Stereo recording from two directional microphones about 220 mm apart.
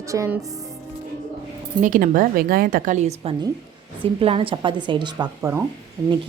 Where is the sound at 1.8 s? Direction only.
40° right (ahead or behind).